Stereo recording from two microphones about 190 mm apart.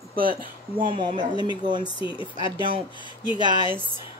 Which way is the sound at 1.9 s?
25° left (ahead or behind).